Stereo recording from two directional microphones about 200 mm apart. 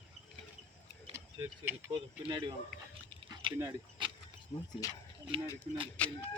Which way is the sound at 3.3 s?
20° right (ahead or behind).